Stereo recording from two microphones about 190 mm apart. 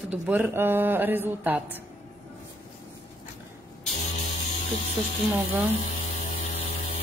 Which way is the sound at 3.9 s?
40° left (ahead or behind).